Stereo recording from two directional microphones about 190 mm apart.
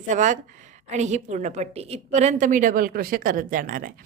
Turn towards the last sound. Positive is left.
turn(degrees=-45)  # may be behind; listen again after turning